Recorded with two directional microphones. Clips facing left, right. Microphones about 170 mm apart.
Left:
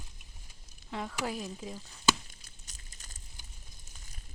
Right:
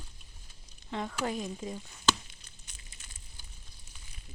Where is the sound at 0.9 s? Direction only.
5° left (ahead or behind).